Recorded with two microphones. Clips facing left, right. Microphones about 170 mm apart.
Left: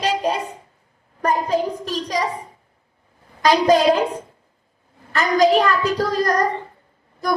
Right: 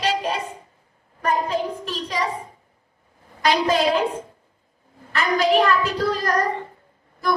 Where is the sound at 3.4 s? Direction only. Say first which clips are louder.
Left 5 dB; 40° left (ahead or behind).